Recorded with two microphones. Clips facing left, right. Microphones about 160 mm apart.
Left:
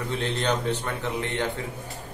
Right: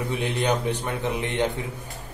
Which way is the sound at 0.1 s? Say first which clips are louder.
Right 1 dB; 10° right (ahead or behind).